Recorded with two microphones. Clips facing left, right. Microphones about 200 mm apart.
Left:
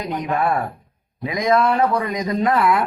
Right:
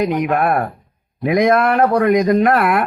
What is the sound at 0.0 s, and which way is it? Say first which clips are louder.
A man's voice: right 5 dB; 65° right (ahead or behind).